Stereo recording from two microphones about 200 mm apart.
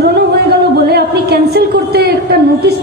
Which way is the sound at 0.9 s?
55° right (ahead or behind).